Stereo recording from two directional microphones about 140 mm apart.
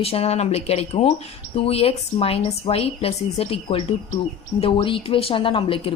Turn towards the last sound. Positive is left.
turn(degrees=40)  # may be behind; listen again after turning